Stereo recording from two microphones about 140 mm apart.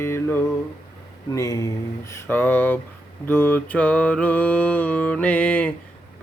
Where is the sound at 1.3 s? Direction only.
25° left (ahead or behind).